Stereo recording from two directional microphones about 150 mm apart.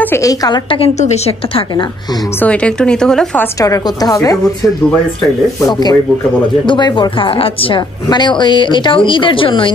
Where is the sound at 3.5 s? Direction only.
25° left (ahead or behind).